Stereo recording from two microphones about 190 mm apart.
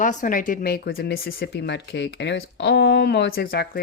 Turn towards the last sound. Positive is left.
turn(degrees=55)  # may be behind; listen again after turning